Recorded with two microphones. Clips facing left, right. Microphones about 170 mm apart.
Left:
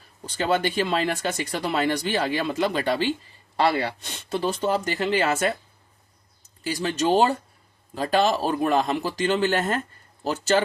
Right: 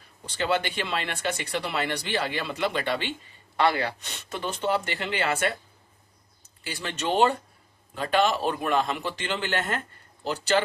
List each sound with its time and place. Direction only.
0.3 s speech: 45° left (ahead or behind)
6.7 s speech: 40° left (ahead or behind)